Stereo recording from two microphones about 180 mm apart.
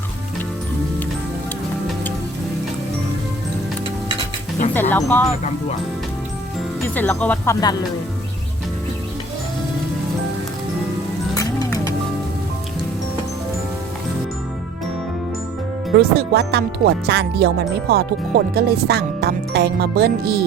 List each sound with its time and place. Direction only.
4.7 s speech: 10° left (ahead or behind)
6.8 s speech: 10° left (ahead or behind)
11.3 s music: 20° left (ahead or behind)
16.0 s speech: 65° right (ahead or behind)